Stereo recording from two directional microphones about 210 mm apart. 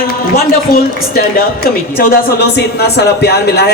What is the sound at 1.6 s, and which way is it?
Speech, 45° left (ahead or behind).